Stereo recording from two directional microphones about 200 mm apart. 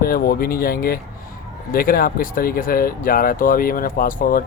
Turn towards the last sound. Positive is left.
turn(degrees=45)  # may be behind; listen again after turning